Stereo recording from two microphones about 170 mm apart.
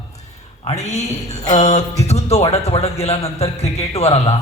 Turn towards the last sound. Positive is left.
turn(degrees=35)  # may be behind; listen again after turning